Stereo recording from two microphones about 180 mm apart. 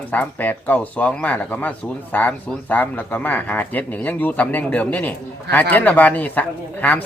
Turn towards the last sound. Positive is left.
turn(degrees=10)  # may be behind; listen again after turning